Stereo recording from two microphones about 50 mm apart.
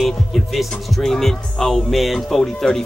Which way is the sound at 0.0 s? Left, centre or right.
Centre.